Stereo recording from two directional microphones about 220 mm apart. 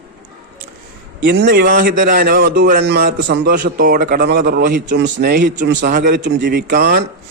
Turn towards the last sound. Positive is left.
turn(degrees=-45)  # may be behind; listen again after turning